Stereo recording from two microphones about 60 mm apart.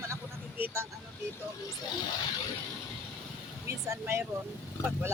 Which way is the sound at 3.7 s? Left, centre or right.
Right.